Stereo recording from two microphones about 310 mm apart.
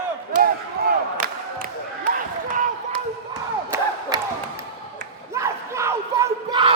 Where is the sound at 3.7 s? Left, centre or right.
Centre.